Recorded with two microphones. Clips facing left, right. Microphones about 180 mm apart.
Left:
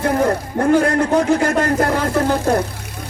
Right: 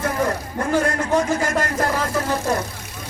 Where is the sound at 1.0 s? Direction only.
60° left (ahead or behind).